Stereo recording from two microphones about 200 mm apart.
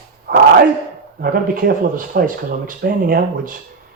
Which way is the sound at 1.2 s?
45° right (ahead or behind).